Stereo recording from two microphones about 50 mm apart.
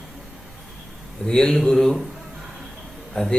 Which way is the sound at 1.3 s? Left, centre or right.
Centre.